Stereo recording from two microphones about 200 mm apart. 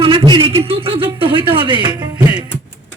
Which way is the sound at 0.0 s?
25° right (ahead or behind).